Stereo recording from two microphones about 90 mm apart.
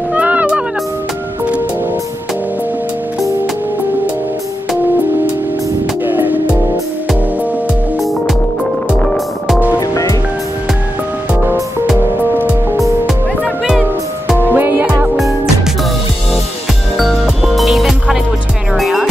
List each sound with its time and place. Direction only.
0.1 s music: 15° right (ahead or behind)
6.0 s music: 20° right (ahead or behind)
9.8 s music: 35° left (ahead or behind)
13.4 s music: 5° right (ahead or behind)
14.4 s music: 25° right (ahead or behind)
16.9 s music: centre (ahead or behind)